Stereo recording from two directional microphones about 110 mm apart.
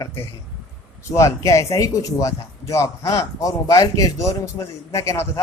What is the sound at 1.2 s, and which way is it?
Speech, 30° left (ahead or behind).